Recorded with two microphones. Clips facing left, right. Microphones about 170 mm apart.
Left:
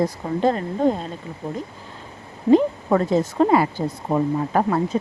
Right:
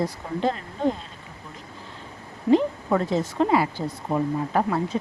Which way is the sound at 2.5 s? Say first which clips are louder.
Left 4 dB; 45° left (ahead or behind).